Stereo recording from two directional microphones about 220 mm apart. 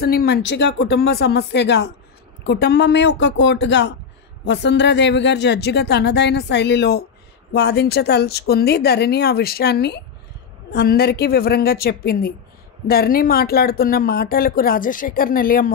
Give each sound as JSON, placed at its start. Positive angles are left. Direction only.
{"t": 0.0, "sound": "speech", "side_deg": 45}